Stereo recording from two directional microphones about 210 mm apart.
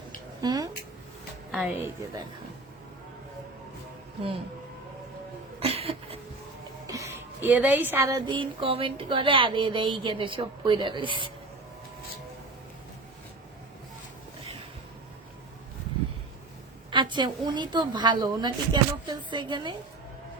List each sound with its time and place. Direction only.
0.4 s speech: 15° right (ahead or behind)
1.5 s a woman's voice: 5° right (ahead or behind)
5.5 s a sound: 30° right (ahead or behind)
6.8 s speech: 15° right (ahead or behind)
16.9 s speech: 20° right (ahead or behind)